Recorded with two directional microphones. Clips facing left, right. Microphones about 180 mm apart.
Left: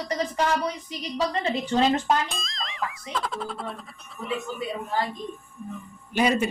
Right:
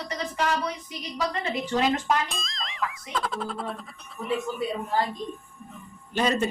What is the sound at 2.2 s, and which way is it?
Speech, centre (ahead or behind).